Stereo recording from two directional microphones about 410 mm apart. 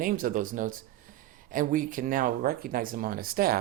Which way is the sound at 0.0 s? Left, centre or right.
Centre.